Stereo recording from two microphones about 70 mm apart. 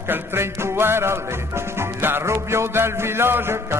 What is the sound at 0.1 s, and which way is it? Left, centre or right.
Music, right.